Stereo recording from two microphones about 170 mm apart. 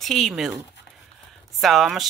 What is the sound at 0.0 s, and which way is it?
Speech, centre (ahead or behind).